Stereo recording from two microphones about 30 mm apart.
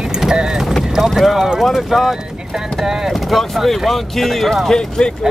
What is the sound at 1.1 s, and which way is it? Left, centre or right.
Speech, centre.